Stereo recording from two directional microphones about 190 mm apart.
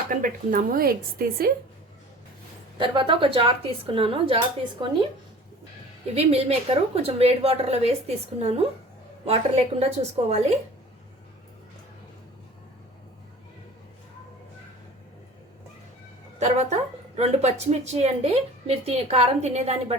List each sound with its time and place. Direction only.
0.1 s a woman's voice: 45° right (ahead or behind)
2.7 s a woman's voice: 25° right (ahead or behind)
6.1 s a woman's voice: 30° right (ahead or behind)
16.4 s a woman's voice: 35° right (ahead or behind)